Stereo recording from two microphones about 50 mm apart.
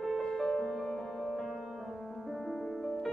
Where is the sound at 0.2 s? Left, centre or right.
Centre.